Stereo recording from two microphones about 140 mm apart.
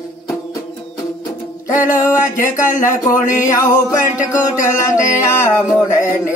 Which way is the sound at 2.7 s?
65° left (ahead or behind).